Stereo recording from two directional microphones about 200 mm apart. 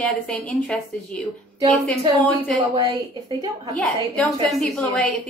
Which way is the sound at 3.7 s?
Centre (ahead or behind).